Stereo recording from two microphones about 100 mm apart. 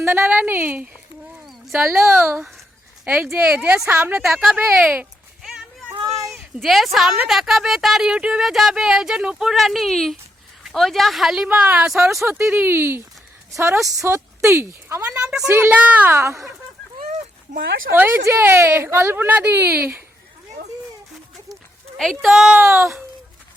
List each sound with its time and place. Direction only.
0.0 s speech: 25° right (ahead or behind)
2.0 s speech: 25° right (ahead or behind)
3.3 s speech: 10° right (ahead or behind)
4.2 s speech: centre (ahead or behind)
4.5 s speech: 15° right (ahead or behind)
6.3 s a woman's voice: centre (ahead or behind)
11.4 s speech: 15° right (ahead or behind)
12.2 s a woman's voice: 25° right (ahead or behind)
16.1 s speech: 30° right (ahead or behind)
17.9 s speech: 20° right (ahead or behind)
21.5 s a sound: 5° left (ahead or behind)
22.6 s speech: 30° right (ahead or behind)